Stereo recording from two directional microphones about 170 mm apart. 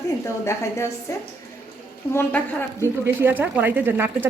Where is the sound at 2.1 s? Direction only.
15° left (ahead or behind).